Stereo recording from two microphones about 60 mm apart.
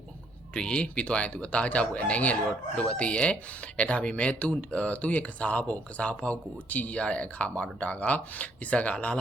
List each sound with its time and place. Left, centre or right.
0.5 s speech: centre